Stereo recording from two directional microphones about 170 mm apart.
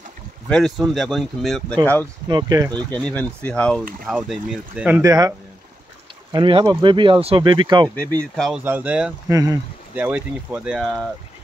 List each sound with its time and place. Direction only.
0.5 s speech: centre (ahead or behind)
2.2 s speech: 20° right (ahead or behind)
2.9 s speech: 5° left (ahead or behind); by 5.1 s 10° right (ahead or behind)
6.3 s speech: 25° right (ahead or behind)
8.4 s speech: 5° right (ahead or behind)
9.3 s speech: 20° right (ahead or behind); by 11.1 s centre (ahead or behind)